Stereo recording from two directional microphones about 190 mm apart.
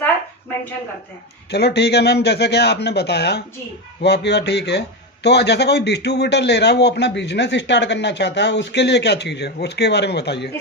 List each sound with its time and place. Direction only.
1.5 s speech: 60° left (ahead or behind)